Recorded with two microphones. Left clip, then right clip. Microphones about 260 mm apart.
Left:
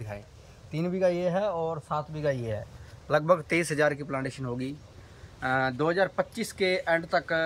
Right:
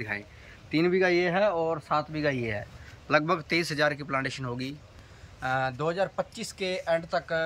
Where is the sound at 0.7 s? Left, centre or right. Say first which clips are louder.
Right 3 dB; left; by 4.1 s centre.